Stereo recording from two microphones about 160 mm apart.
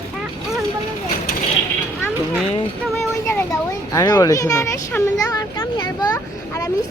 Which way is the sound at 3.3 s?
15° left (ahead or behind).